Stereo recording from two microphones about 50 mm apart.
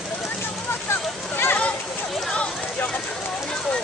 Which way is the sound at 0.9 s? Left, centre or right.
Left.